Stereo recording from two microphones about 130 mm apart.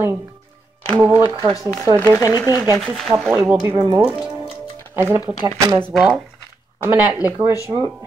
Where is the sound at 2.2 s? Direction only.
30° left (ahead or behind).